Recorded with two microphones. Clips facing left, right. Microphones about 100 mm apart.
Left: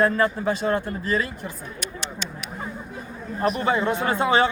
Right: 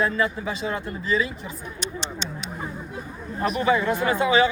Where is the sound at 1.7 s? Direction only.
25° right (ahead or behind).